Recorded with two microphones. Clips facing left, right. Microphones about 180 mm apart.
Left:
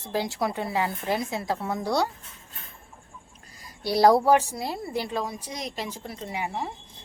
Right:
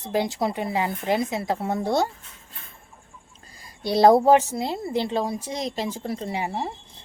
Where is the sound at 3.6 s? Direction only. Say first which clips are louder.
Right 3 dB; 25° right (ahead or behind).